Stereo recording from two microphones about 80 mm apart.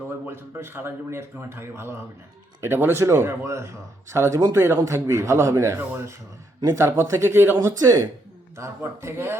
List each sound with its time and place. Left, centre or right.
0.3 s a man's voice: right
7.8 s speech: right
8.5 s speech: right